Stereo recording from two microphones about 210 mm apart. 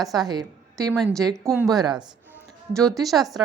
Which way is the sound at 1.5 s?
Centre (ahead or behind).